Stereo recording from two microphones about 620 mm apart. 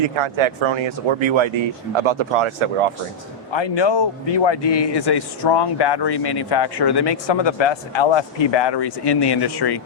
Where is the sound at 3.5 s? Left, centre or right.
Left.